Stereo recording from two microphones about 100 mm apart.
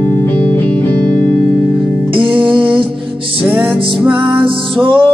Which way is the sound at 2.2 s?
15° right (ahead or behind).